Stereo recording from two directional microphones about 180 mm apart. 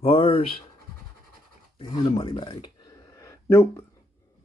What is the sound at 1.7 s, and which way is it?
Speech, 25° left (ahead or behind).